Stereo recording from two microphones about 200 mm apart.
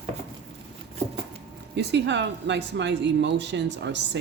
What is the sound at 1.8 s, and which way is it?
Speech, 60° right (ahead or behind).